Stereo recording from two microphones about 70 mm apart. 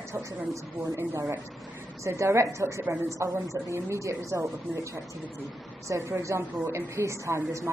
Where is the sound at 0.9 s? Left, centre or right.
Right.